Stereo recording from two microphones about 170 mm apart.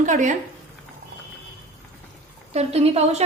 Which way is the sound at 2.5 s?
40° right (ahead or behind).